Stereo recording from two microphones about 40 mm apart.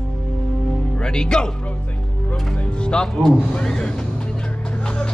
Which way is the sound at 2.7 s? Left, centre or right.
Left.